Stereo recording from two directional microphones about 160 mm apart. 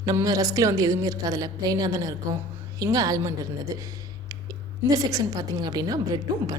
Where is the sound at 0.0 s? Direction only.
20° right (ahead or behind).